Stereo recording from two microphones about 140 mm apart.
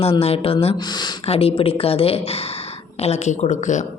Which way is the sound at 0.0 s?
45° left (ahead or behind).